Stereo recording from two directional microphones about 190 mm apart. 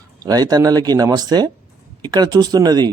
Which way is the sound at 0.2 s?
20° right (ahead or behind).